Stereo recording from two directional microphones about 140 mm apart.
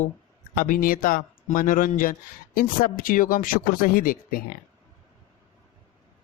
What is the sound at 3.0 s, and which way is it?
Speech, 85° left.